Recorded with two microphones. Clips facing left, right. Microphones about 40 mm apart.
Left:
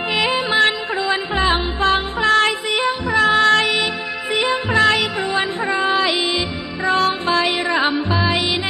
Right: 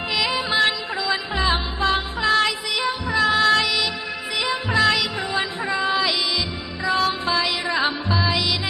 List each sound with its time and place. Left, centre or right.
0.1 s music: left
2.2 s music: left
7.6 s music: left
8.3 s music: left